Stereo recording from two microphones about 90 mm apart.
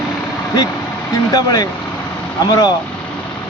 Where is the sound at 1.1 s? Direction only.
45° left (ahead or behind).